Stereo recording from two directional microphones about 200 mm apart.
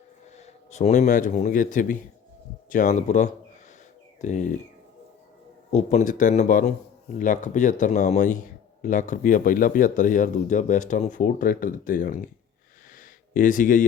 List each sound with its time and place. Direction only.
0.3 s speech: 35° left (ahead or behind)
5.7 s speech: 35° left (ahead or behind)
12.9 s a sound: 40° left (ahead or behind)